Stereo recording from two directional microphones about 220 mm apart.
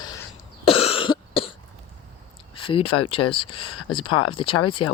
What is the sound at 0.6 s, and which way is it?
Cough, 25° left (ahead or behind).